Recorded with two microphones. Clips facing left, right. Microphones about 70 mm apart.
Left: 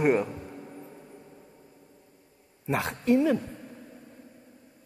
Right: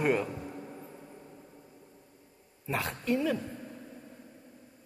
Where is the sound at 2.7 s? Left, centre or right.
Left.